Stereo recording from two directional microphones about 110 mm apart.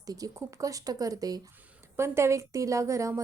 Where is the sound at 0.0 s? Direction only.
35° right (ahead or behind).